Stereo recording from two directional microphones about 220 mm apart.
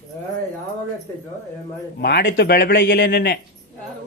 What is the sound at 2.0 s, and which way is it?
Speech, 45° left (ahead or behind).